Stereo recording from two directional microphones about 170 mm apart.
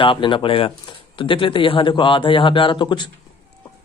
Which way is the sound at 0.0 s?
30° left (ahead or behind).